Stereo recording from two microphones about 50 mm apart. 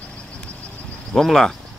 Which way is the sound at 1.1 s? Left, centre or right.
Centre.